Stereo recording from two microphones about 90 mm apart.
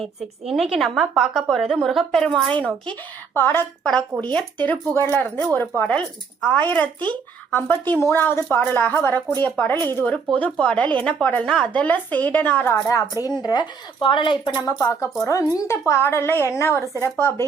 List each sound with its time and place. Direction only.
0.0 s a woman's voice: centre (ahead or behind)
2.5 s a woman's voice: 15° left (ahead or behind)
4.1 s speech: 30° right (ahead or behind)
4.6 s speech: 20° left (ahead or behind)
5.9 s a woman's voice: 10° left (ahead or behind)
12.7 s a woman's voice: 35° left (ahead or behind)
13.1 s speech: 30° right (ahead or behind)
13.4 s speech: 55° left (ahead or behind)
14.5 s speech: 45° left (ahead or behind)
14.8 s a woman's voice: 30° left (ahead or behind)